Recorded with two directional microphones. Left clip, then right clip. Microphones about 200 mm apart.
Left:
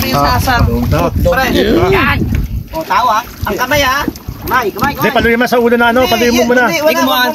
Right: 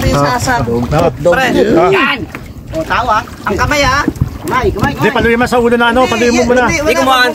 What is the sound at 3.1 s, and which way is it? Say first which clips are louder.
Speech: even; centre (ahead or behind).